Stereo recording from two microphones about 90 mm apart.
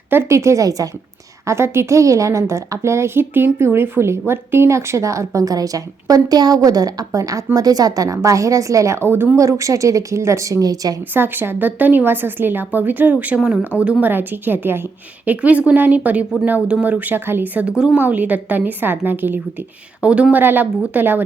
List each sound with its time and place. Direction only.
0.1 s a woman's voice: 30° right (ahead or behind)
1.5 s a woman's voice: 30° right (ahead or behind)
11.1 s a woman's voice: 25° right (ahead or behind)